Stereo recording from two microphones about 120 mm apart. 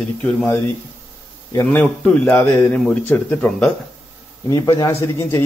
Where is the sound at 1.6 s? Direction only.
15° left (ahead or behind).